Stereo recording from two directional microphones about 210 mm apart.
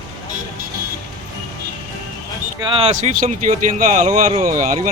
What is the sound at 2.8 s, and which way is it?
Speech, 35° right (ahead or behind).